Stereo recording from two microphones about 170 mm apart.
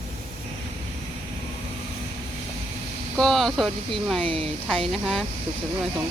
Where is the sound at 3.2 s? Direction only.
Centre (ahead or behind).